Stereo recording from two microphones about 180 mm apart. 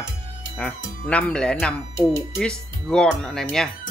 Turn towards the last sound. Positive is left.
turn(degrees=0)  # may be behind; listen again after turning